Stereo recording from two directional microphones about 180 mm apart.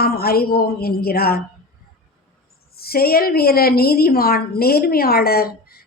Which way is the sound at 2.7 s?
60° left (ahead or behind).